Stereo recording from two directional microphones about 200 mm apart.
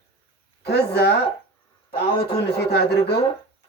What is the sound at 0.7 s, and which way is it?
Speech, 55° left (ahead or behind).